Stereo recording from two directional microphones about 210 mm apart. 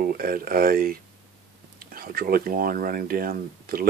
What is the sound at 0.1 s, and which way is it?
Speech, 45° right (ahead or behind).